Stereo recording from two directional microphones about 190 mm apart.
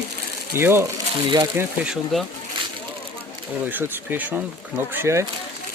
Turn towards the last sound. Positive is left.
turn(degrees=-15)  # may be behind; listen again after turning